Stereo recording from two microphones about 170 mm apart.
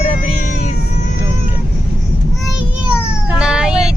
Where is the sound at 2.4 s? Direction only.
5° right (ahead or behind).